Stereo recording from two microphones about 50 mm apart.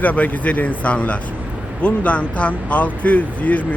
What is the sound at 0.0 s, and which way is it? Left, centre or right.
Speech, left.